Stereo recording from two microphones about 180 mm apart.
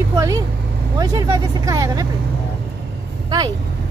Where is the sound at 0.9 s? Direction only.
20° right (ahead or behind).